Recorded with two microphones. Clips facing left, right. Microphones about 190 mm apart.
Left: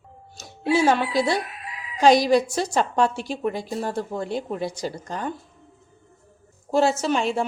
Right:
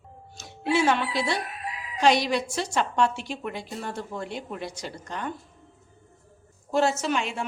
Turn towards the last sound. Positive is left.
turn(degrees=35)  # may be behind; listen again after turning